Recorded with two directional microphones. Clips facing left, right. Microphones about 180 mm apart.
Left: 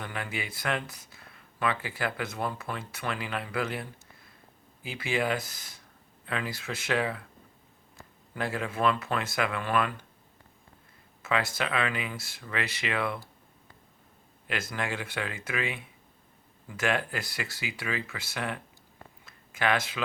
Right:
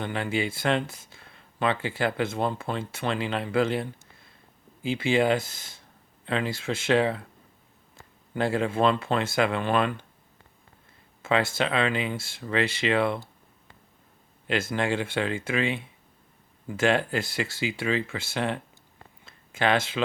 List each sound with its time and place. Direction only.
0.0 s speech: 30° right (ahead or behind)
11.2 s speech: 30° right (ahead or behind)
14.4 s speech: 25° right (ahead or behind)
19.2 s a sound: 25° right (ahead or behind)